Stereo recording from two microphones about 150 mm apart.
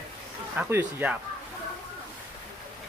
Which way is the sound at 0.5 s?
10° right (ahead or behind).